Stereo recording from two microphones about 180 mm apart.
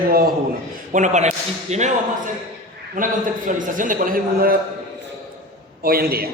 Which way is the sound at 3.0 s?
45° right (ahead or behind).